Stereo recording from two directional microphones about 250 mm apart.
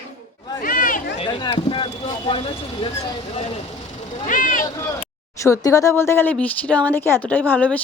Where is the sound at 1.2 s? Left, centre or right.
Left.